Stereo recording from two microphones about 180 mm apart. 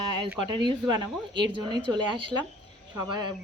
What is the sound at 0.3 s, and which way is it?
Speech, 25° right (ahead or behind).